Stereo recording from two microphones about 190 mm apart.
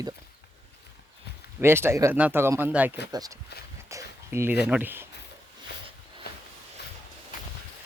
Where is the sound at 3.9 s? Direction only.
15° right (ahead or behind).